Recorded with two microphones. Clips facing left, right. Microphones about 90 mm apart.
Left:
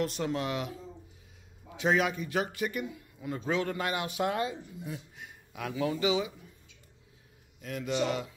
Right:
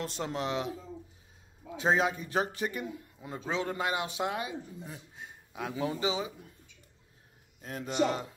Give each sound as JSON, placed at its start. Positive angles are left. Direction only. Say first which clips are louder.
{"t": 0.0, "sound": "a man's voice", "louder": "left 3 dB", "side_deg": -25}
{"t": 1.8, "sound": "a man's voice", "louder": "even", "side_deg": -30}
{"t": 5.1, "sound": "speech", "louder": "right 1 dB", "side_deg": -30}
{"t": 7.6, "sound": "a man's voice", "louder": "right 1 dB", "side_deg": -35}